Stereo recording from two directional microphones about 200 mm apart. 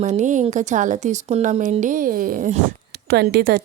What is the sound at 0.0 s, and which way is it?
Speech, 35° right (ahead or behind).